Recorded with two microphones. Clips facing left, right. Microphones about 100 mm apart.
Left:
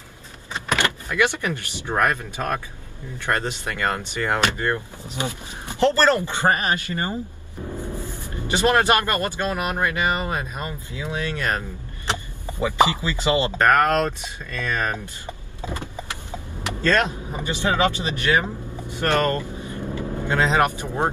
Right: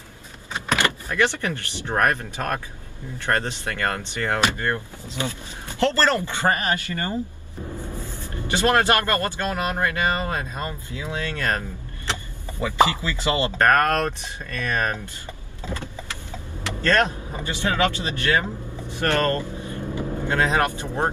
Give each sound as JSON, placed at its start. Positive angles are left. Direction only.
{"t": 0.7, "sound": "speech", "side_deg": 15}
{"t": 3.3, "sound": "speech", "side_deg": 15}
{"t": 14.4, "sound": "speech", "side_deg": -55}
{"t": 14.8, "sound": "power windows", "side_deg": 20}
{"t": 18.9, "sound": "speech", "side_deg": 20}